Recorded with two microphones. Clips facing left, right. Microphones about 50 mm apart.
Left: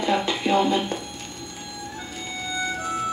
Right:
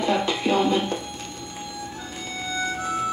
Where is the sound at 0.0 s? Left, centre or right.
Left.